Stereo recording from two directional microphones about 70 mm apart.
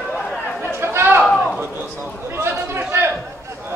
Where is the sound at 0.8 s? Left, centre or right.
Right.